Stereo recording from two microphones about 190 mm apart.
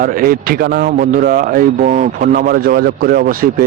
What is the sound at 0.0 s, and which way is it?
Speech, 50° right (ahead or behind).